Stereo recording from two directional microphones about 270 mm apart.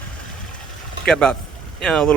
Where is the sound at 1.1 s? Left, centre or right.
Centre.